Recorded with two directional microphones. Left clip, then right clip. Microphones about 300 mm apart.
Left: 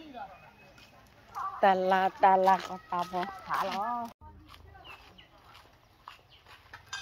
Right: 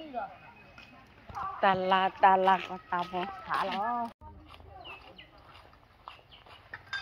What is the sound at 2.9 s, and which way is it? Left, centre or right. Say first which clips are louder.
Speech: even; centre.